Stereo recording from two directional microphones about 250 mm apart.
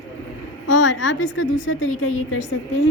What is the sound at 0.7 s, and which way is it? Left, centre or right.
A woman's voice, left.